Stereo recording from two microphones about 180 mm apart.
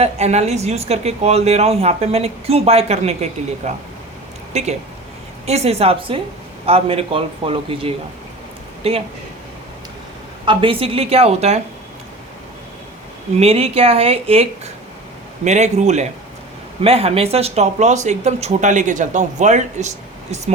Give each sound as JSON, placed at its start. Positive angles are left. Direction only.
{"t": 0.0, "sound": "speech", "side_deg": -35}
{"t": 4.5, "sound": "speech", "side_deg": -40}
{"t": 10.4, "sound": "speech", "side_deg": -25}
{"t": 13.3, "sound": "speech", "side_deg": -35}